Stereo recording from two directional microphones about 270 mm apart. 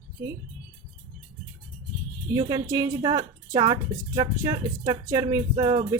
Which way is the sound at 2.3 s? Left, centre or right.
Centre.